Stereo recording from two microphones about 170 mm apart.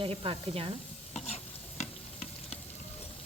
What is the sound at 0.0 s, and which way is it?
Speech, 35° right (ahead or behind).